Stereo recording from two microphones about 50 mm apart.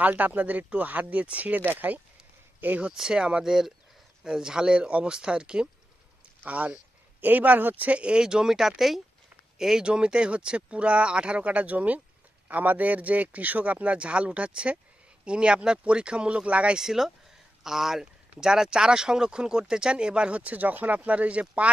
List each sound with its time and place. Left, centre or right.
0.0 s speech: right
2.9 s speech: centre
6.4 s speech: right; by 9.8 s centre
9.8 s speech: centre
16.7 s speech: centre; by 21.6 s right